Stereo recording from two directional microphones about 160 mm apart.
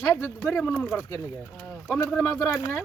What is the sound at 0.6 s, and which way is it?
Speech, 10° left (ahead or behind).